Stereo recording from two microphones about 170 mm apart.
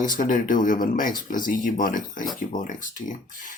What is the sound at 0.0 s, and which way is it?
Speech, 50° left (ahead or behind).